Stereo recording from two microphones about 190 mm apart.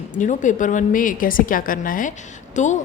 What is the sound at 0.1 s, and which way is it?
A woman's voice, 40° left (ahead or behind).